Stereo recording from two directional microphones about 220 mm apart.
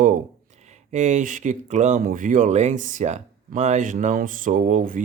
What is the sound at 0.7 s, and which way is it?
Speech, 30° right (ahead or behind).